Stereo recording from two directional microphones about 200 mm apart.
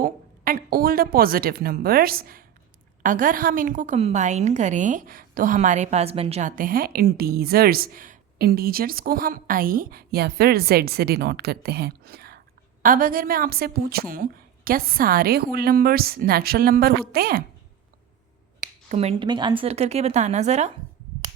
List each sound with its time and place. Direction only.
0.0 s a woman's voice: 45° right (ahead or behind)
6.6 s a woman's voice: 45° right (ahead or behind)
18.9 s a woman's voice: 30° right (ahead or behind)